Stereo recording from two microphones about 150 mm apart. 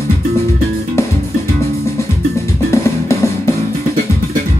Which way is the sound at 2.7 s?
20° left (ahead or behind).